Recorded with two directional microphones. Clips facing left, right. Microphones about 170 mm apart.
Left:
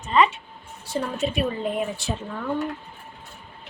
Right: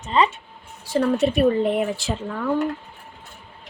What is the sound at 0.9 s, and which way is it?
A woman's voice, 65° right (ahead or behind).